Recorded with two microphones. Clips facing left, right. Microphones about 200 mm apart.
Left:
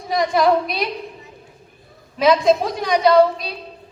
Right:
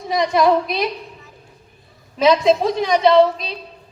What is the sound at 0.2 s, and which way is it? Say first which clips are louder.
Speech: right 1 dB; 20° right (ahead or behind).